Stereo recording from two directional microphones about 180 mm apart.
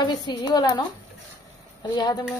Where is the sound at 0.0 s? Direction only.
25° left (ahead or behind).